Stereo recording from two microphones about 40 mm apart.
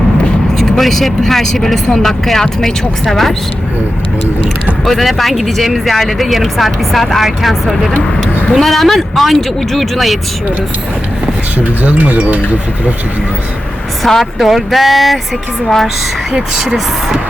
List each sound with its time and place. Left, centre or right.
0.6 s speech: centre
4.9 s speech: centre
11.6 s speech: right
14.2 s speech: centre
15.6 s speech: centre
16.3 s speech: centre